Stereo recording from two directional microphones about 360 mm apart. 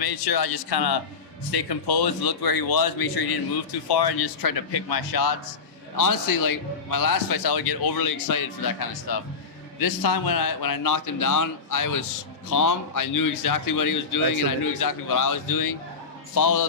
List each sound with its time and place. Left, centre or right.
0.0 s speech: left
6.0 s a man's voice: left